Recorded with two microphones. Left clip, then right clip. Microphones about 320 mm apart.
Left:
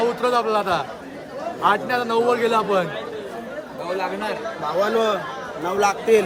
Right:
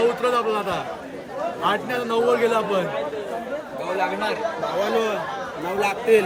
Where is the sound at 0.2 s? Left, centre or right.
Left.